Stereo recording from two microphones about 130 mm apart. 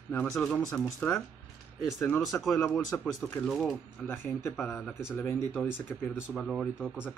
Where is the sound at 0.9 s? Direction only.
15° left (ahead or behind).